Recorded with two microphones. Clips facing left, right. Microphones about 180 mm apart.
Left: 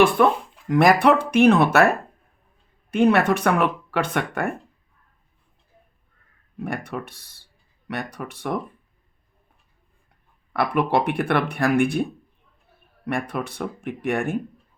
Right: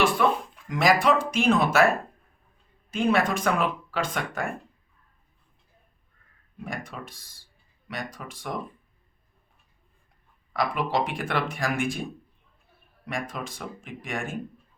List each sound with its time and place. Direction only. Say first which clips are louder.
0.2 s speech: left 5 dB; 50° left (ahead or behind)
2.9 s speech: left 6 dB; 65° left (ahead or behind)
6.7 s speech: left 6 dB; 65° left (ahead or behind)
10.5 s speech: left 5 dB; 60° left (ahead or behind)
13.1 s speech: left 6 dB; 65° left (ahead or behind)